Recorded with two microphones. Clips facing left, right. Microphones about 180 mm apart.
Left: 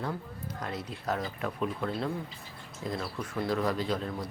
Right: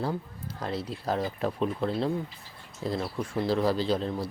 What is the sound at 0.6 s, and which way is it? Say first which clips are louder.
Speech: right 5 dB; 30° right (ahead or behind).